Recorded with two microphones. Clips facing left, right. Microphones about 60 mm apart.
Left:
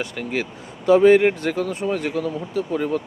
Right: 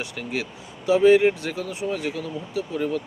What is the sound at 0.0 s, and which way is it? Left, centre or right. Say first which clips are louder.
Speech: left 4 dB; left.